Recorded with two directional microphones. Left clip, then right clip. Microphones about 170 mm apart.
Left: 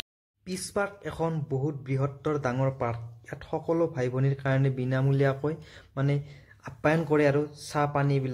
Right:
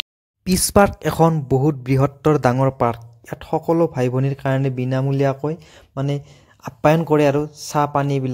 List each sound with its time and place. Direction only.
0.4 s a man's voice: 60° right (ahead or behind); by 8.3 s 45° right (ahead or behind)